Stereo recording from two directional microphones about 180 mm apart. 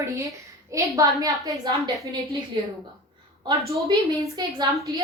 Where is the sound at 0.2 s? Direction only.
15° right (ahead or behind).